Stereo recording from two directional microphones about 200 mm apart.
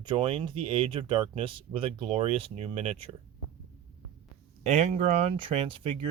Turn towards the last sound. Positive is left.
turn(degrees=-25)  # may be behind; listen again after turning